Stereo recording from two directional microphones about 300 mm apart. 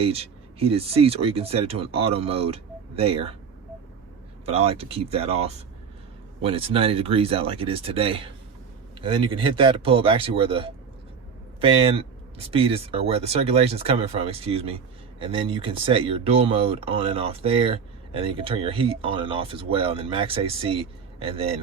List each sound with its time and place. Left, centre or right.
0.0 s speech: centre
4.4 s speech: centre